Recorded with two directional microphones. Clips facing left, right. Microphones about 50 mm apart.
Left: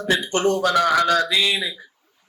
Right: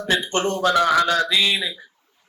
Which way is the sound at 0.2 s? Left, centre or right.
Right.